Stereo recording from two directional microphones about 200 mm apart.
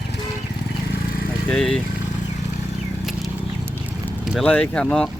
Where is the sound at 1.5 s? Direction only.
5° left (ahead or behind).